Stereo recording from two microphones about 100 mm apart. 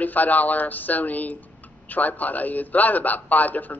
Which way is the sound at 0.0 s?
15° left (ahead or behind).